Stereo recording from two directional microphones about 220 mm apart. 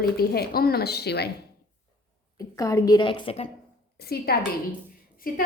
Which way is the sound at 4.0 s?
45° left (ahead or behind).